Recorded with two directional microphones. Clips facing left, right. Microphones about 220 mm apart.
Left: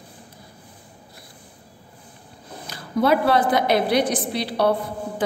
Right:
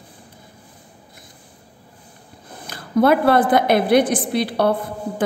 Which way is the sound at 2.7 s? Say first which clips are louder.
Right 4 dB; 55° right (ahead or behind).